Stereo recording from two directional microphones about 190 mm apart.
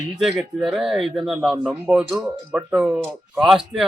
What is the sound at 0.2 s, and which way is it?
Speech, centre (ahead or behind).